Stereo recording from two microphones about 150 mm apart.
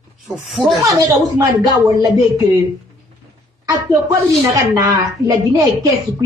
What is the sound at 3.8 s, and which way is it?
Speech, 20° right (ahead or behind).